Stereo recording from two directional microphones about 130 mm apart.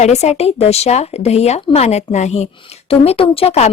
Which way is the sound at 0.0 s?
60° left (ahead or behind).